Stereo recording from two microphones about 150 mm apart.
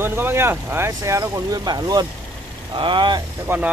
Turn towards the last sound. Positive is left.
turn(degrees=-15)  # may be behind; listen again after turning